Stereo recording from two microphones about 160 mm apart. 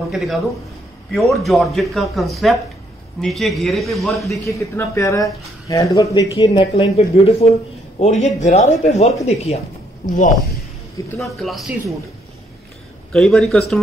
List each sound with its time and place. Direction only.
0.1 s a man's voice: centre (ahead or behind)
4.5 s speech: 20° left (ahead or behind); by 9.6 s 40° left (ahead or behind)
11.1 s a man's voice: centre (ahead or behind)
13.1 s a man's voice: 5° left (ahead or behind)